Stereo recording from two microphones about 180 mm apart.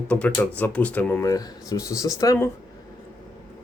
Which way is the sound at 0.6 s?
10° left (ahead or behind).